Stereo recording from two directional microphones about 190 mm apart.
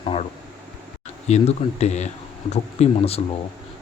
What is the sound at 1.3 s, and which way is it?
Speech, 35° left (ahead or behind).